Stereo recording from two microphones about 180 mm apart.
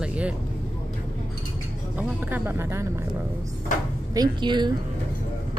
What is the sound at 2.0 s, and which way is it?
Speech, 10° right (ahead or behind).